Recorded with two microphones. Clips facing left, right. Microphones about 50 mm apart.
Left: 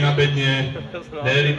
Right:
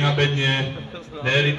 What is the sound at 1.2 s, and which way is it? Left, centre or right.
Speech, centre.